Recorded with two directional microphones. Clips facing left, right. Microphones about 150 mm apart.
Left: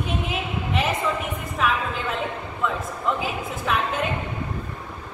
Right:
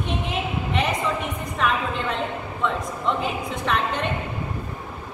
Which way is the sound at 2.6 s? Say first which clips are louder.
Right 1 dB; 5° left (ahead or behind).